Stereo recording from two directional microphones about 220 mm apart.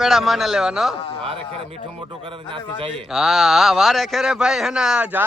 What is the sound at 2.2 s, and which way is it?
Speech, 25° right (ahead or behind).